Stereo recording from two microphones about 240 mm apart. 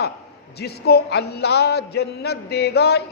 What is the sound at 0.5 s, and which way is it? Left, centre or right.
Speech, left.